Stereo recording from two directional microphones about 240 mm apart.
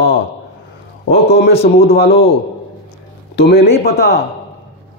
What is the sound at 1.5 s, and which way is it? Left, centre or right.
Speech, left.